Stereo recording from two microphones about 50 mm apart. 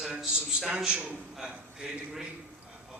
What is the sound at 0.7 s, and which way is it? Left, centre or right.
A man's voice, centre.